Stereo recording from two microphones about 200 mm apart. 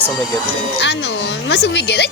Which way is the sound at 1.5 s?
60° left (ahead or behind).